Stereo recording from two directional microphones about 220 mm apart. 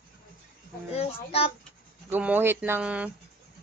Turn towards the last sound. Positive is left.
turn(degrees=-5)  # may be behind; listen again after turning